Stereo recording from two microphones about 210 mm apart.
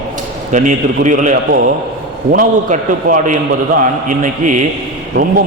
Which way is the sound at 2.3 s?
40° right (ahead or behind).